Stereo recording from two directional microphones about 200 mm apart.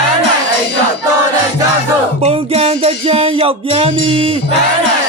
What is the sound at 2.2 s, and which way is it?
Music, 30° right (ahead or behind).